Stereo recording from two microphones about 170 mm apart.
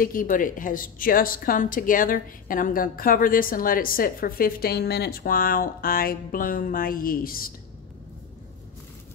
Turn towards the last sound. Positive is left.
turn(degrees=60)  # may be behind; listen again after turning